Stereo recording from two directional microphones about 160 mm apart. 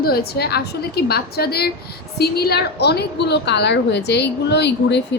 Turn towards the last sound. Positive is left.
turn(degrees=90)